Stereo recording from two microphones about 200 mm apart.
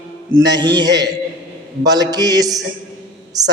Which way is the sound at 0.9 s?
60° right (ahead or behind).